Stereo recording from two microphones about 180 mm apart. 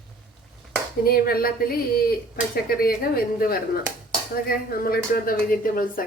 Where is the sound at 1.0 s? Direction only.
55° left (ahead or behind).